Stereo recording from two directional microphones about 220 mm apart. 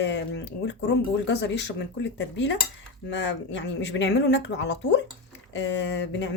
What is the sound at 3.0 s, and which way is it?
Speech, 55° left (ahead or behind).